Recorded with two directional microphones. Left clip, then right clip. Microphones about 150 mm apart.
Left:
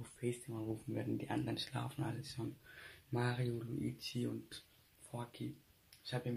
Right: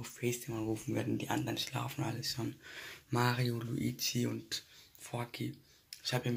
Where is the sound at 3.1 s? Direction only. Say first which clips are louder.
Right 7 dB; centre (ahead or behind).